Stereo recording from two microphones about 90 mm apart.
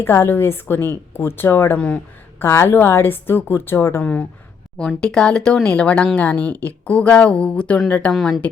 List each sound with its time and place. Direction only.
0.0 s a woman's voice: 25° left (ahead or behind)
4.0 s speech: 15° left (ahead or behind)
8.1 s speech: 5° left (ahead or behind)